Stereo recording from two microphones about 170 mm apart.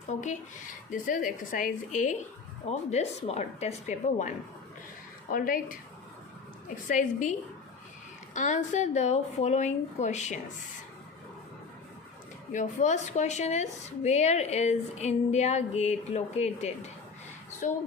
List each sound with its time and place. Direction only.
0.1 s a woman's voice: 45° left (ahead or behind)
6.8 s a woman's voice: 50° left (ahead or behind)
12.5 s speech: 45° left (ahead or behind)